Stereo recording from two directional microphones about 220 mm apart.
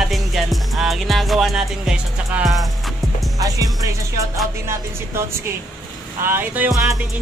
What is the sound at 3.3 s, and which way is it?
Music, 15° right (ahead or behind).